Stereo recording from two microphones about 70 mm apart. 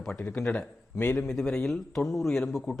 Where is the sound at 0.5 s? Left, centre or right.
Left.